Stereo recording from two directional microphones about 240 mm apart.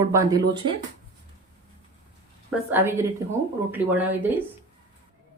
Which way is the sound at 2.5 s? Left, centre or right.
Centre.